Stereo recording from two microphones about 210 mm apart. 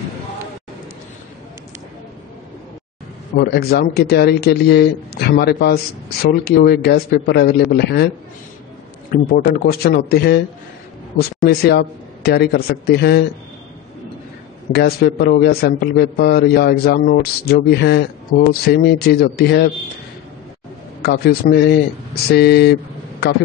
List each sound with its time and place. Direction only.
3.3 s a man's voice: 50° left (ahead or behind)
9.1 s a man's voice: 40° left (ahead or behind)
11.4 s a man's voice: 50° left (ahead or behind)
14.7 s a man's voice: 50° left (ahead or behind)
21.0 s a man's voice: 50° left (ahead or behind)